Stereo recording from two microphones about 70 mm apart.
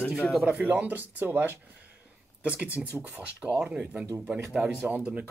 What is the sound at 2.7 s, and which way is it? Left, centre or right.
Speech, right.